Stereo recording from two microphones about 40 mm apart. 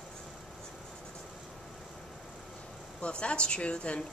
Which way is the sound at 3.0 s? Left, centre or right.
Left.